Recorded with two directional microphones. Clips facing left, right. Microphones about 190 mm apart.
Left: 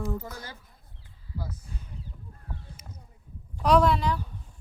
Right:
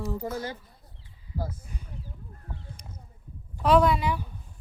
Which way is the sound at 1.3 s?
45° right (ahead or behind).